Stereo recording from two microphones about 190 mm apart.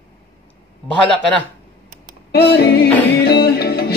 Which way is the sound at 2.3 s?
65° left (ahead or behind).